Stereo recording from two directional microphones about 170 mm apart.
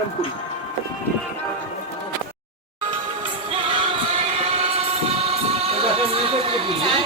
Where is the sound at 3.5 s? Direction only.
35° right (ahead or behind).